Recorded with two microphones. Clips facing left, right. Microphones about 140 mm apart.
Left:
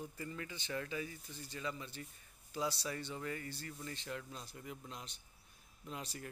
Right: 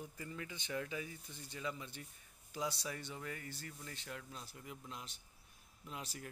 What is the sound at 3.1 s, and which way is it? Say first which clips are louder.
Speech: left 4 dB; centre (ahead or behind).